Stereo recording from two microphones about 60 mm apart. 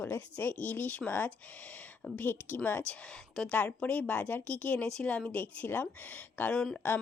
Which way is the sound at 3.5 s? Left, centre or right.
Left.